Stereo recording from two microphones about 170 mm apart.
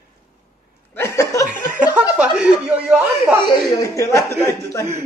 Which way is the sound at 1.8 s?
10° right (ahead or behind).